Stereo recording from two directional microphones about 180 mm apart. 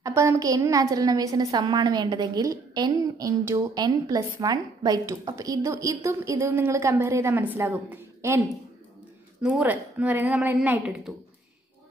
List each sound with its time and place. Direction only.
0.0 s a woman's voice: 15° right (ahead or behind)